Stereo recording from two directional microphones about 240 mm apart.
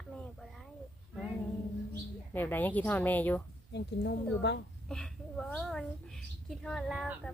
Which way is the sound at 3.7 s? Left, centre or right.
Left.